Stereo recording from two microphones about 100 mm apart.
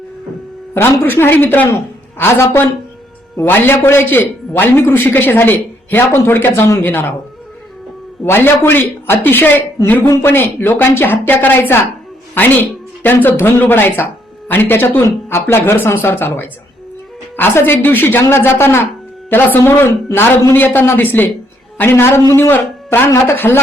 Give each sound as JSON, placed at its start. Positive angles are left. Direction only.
{"t": 0.7, "sound": "a man's voice", "side_deg": 20}
{"t": 8.2, "sound": "a man's voice", "side_deg": 20}
{"t": 13.0, "sound": "a man's voice", "side_deg": 20}
{"t": 17.3, "sound": "a man's voice", "side_deg": 20}